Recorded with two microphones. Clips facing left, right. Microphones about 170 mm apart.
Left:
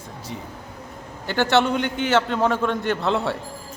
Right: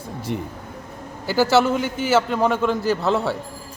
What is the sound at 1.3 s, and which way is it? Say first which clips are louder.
A man's voice: right 2 dB; 5° right (ahead or behind).